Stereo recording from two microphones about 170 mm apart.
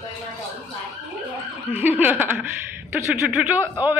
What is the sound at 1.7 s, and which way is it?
A man's voice, 10° right (ahead or behind).